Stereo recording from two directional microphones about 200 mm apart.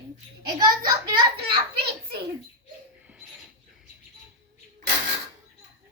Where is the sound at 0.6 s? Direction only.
20° right (ahead or behind).